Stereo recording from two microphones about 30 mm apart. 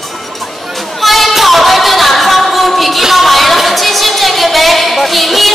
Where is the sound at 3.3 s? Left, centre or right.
Centre.